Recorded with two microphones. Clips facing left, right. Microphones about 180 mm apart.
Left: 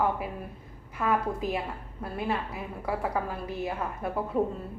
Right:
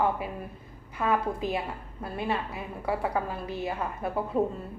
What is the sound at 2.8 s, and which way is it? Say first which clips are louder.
A woman's voice: right 1 dB; centre (ahead or behind).